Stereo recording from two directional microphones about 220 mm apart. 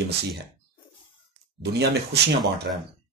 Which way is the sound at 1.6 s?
50° right (ahead or behind).